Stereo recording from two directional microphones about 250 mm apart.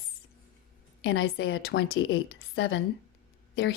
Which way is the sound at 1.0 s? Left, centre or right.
Left.